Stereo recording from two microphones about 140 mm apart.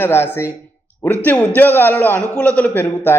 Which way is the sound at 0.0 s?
15° left (ahead or behind).